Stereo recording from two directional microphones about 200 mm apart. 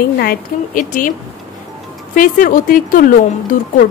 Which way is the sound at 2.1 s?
40° left (ahead or behind).